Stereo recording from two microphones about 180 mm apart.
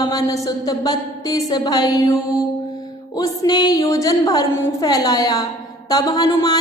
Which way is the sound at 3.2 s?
20° left (ahead or behind).